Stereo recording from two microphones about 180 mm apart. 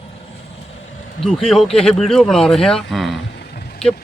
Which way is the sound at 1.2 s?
Centre (ahead or behind).